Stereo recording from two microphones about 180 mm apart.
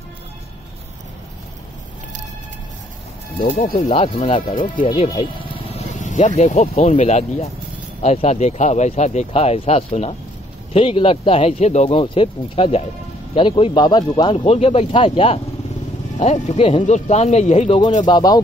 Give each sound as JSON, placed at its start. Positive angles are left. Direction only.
{"t": 3.3, "sound": "speech", "side_deg": 45}
{"t": 5.7, "sound": "speech", "side_deg": 40}